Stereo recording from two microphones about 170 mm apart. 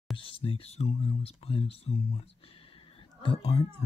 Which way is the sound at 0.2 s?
30° left (ahead or behind).